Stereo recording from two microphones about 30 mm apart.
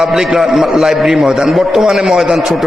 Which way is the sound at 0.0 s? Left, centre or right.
Centre.